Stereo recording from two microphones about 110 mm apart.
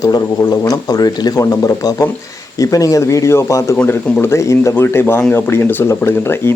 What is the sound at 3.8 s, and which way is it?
Speech, 15° left (ahead or behind).